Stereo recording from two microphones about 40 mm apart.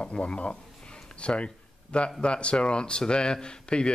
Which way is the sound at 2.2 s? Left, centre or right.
Left.